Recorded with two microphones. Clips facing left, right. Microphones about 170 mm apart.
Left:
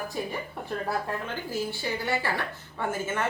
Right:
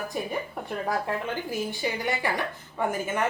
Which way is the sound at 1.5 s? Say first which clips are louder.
Left 2 dB; 15° right (ahead or behind).